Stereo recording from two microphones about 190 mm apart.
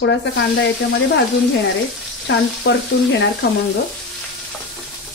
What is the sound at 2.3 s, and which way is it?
Speech, 60° left (ahead or behind).